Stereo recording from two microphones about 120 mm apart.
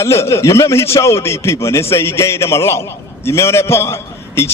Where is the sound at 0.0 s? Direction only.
25° left (ahead or behind).